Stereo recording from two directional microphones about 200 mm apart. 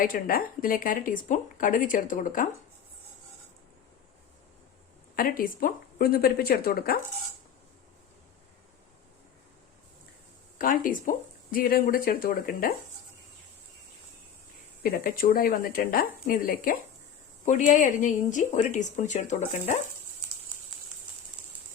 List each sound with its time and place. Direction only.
0.0 s speech: 45° left (ahead or behind)
5.1 s speech: 45° left (ahead or behind)
10.6 s speech: 45° left (ahead or behind)
14.8 s speech: 45° left (ahead or behind)